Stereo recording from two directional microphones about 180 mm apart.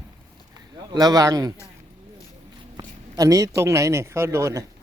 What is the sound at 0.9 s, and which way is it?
Speech, 20° right (ahead or behind).